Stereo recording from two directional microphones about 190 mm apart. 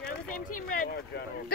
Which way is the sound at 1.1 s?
55° left (ahead or behind).